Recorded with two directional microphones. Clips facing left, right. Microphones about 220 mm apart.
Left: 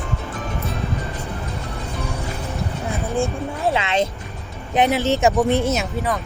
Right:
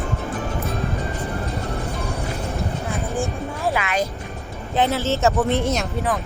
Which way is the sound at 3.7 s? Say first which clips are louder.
Left 2 dB; 25° left (ahead or behind).